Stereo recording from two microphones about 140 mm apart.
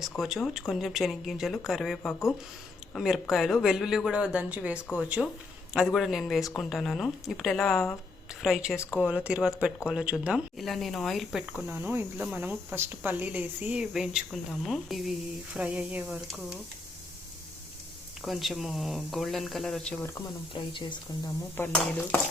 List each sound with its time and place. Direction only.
0.0 s speech: centre (ahead or behind)
11.7 s speech: 15° right (ahead or behind)
18.2 s speech: centre (ahead or behind)
20.5 s speech: 35° left (ahead or behind)
21.6 s dishes: 15° left (ahead or behind)